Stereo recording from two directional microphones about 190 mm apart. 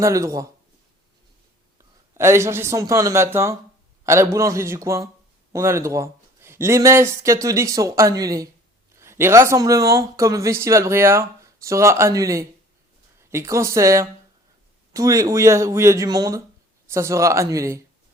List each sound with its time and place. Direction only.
0.0 s speech: 15° right (ahead or behind)
2.1 s speech: 15° right (ahead or behind)